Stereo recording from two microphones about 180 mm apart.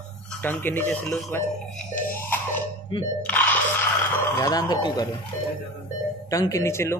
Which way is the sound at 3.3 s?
10° left (ahead or behind).